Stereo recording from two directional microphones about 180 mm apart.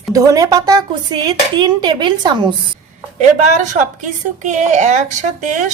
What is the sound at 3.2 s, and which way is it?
A woman's voice, 45° right (ahead or behind).